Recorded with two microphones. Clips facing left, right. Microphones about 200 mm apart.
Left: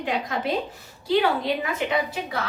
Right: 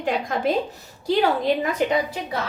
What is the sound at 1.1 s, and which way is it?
Speech, 45° right (ahead or behind).